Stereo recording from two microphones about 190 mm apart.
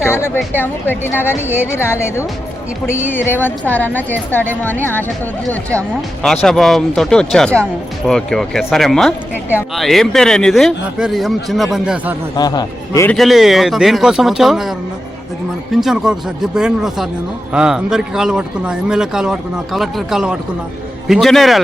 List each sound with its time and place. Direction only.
0.0 s a woman's voice: 10° left (ahead or behind); by 12.1 s 5° right (ahead or behind)
12.4 s a man's voice: 20° left (ahead or behind)
13.1 s speech: centre (ahead or behind)